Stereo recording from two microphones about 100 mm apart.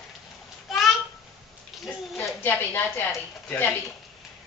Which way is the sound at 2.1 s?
20° left (ahead or behind).